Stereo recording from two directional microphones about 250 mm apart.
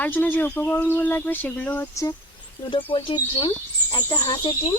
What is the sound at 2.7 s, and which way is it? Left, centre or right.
Speech, left.